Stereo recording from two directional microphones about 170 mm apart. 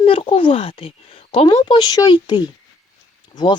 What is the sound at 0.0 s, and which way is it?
Speech, 35° left (ahead or behind).